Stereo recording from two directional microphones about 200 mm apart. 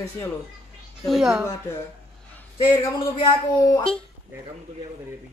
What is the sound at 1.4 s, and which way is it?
Speech, 15° left (ahead or behind).